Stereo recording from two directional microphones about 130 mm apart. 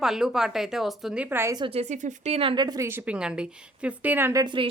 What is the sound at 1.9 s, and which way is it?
Speech, 70° right (ahead or behind).